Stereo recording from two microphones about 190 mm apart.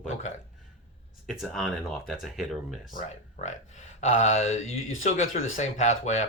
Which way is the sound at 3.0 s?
40° left (ahead or behind).